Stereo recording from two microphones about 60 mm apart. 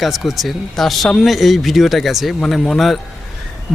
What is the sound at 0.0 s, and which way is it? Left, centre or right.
Speech, centre.